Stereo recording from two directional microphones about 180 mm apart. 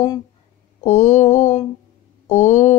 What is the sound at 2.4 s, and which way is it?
Speech, 40° left (ahead or behind).